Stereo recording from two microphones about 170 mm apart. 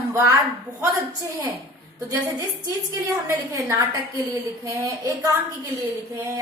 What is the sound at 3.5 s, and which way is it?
A woman's voice, 20° right (ahead or behind).